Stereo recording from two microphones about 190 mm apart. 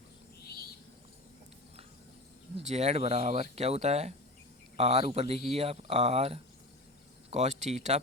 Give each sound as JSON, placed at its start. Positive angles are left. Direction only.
{"t": 0.4, "sound": "bird", "side_deg": 55}
{"t": 2.6, "sound": "speech", "side_deg": -35}